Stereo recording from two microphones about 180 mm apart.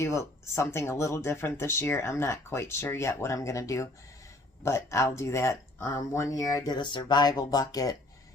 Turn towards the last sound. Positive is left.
turn(degrees=20)  # may be behind; listen again after turning